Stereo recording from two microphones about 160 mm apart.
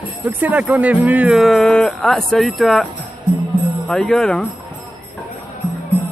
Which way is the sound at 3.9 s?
5° left (ahead or behind).